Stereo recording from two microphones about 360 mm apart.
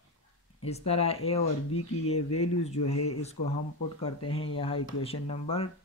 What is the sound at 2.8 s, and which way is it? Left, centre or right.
Speech, left.